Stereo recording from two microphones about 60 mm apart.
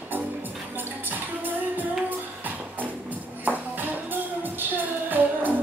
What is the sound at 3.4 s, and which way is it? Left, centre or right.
Music, right.